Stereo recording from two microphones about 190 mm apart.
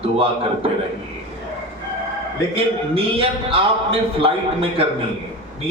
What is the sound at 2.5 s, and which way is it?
A man's voice, 30° right (ahead or behind).